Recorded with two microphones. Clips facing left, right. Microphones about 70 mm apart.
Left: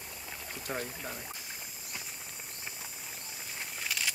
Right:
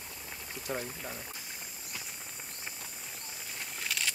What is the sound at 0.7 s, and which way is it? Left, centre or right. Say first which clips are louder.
Speech: even; left.